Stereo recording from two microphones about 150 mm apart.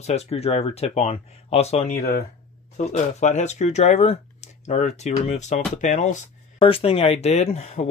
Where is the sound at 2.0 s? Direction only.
80° left.